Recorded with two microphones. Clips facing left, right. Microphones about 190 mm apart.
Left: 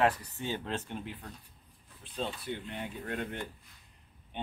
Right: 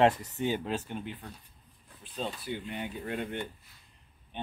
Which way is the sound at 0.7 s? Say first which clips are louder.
Right 3 dB; 5° right (ahead or behind).